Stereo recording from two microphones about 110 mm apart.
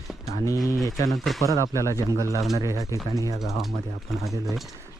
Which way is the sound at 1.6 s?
30° left (ahead or behind).